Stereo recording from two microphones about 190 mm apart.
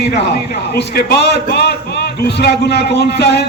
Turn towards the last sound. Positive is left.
turn(degrees=60)  # may be behind; listen again after turning